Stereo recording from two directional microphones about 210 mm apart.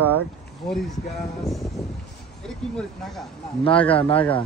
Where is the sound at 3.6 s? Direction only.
25° left (ahead or behind).